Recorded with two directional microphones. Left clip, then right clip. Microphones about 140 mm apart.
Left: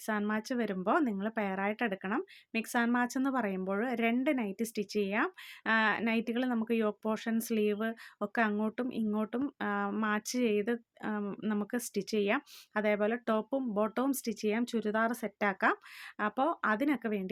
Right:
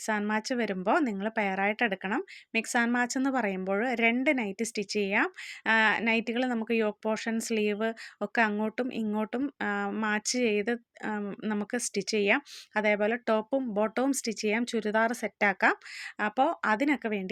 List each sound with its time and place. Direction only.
0.0 s speech: 20° right (ahead or behind)